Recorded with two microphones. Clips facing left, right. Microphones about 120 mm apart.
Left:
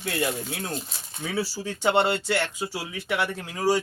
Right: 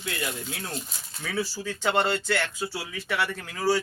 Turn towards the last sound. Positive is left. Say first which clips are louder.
# left 1 dB
turn(degrees=20)  # may be behind; listen again after turning